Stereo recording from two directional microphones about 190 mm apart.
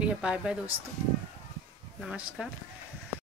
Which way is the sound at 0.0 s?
5° right (ahead or behind).